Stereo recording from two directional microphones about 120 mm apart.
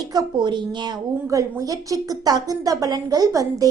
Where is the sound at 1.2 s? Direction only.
30° right (ahead or behind).